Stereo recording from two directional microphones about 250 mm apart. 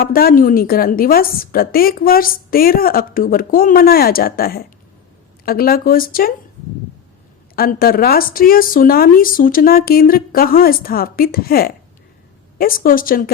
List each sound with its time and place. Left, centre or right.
0.0 s a woman's voice: left
7.5 s a woman's voice: left